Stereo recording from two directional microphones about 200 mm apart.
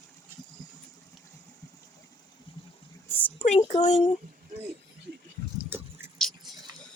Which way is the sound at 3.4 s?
30° left (ahead or behind).